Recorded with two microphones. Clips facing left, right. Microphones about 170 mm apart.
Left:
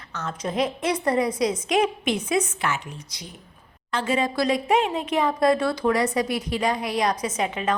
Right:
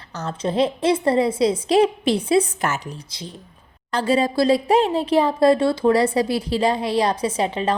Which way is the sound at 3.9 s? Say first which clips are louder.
Right 5 dB; 35° right (ahead or behind).